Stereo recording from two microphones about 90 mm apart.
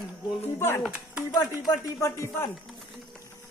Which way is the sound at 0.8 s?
15° right (ahead or behind).